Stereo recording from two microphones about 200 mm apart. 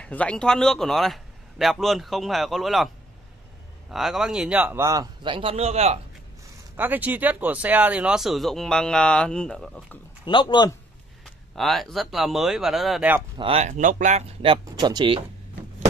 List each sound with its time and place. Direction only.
0.0 s speech: 5° left (ahead or behind)
3.9 s a man's voice: centre (ahead or behind); by 5.9 s 30° right (ahead or behind)
6.8 s speech: 10° right (ahead or behind)
10.2 s speech: 25° left (ahead or behind)
11.2 s speech: centre (ahead or behind)
13.4 s speech: 30° right (ahead or behind)